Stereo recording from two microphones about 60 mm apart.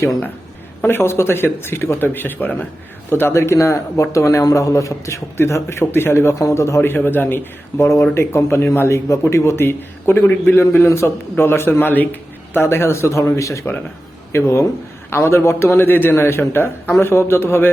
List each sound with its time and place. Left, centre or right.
0.8 s a man's voice: left
6.9 s a man's voice: left
8.9 s speech: left
10.8 s speech: left
12.5 s a man's voice: left